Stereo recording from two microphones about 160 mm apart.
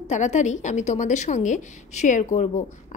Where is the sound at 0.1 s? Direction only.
45° left (ahead or behind).